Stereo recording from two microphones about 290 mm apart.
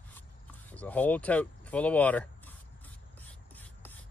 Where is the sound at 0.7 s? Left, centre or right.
Centre.